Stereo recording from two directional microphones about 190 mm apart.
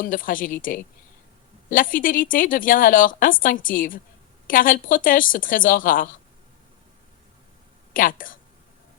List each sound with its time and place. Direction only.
0.0 s speech: 45° left (ahead or behind)
7.9 s speech: 45° left (ahead or behind)